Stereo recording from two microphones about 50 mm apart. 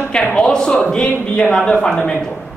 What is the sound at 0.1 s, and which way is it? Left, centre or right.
Speech, centre.